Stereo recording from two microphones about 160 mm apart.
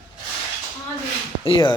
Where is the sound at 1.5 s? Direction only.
30° left (ahead or behind).